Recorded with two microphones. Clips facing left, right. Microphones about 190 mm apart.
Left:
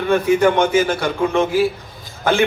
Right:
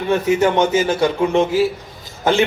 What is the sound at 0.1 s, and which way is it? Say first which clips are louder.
A man's voice: left 1 dB; 20° right (ahead or behind).